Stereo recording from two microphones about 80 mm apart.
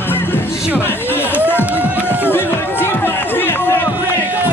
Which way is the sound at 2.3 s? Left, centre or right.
Left.